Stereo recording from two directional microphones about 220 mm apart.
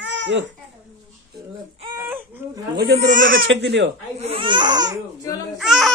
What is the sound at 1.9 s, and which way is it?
Baby cry, 10° right (ahead or behind).